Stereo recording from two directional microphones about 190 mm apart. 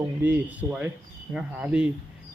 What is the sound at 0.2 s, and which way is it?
Speech, 10° right (ahead or behind).